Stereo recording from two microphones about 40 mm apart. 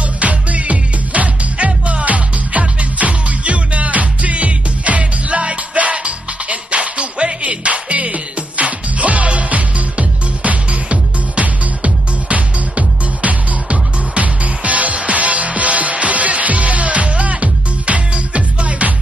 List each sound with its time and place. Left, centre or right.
0.0 s music: right